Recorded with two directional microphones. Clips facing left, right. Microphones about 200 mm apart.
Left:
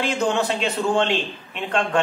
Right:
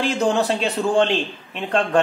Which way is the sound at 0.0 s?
35° right (ahead or behind).